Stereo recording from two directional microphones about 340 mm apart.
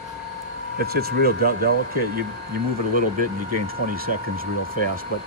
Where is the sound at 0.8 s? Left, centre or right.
Right.